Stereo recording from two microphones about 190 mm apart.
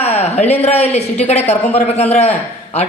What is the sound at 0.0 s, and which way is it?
A man's voice, 35° left (ahead or behind).